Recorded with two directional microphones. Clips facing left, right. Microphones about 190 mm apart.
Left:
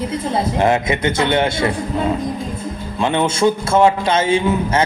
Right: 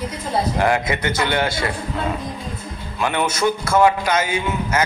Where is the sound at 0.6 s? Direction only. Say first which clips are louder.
Left 5 dB; 25° left (ahead or behind).